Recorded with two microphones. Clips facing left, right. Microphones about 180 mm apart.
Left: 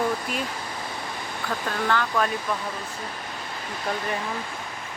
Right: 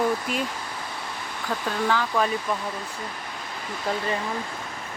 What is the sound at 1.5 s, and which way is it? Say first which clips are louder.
Speech: right 1 dB; 5° right (ahead or behind).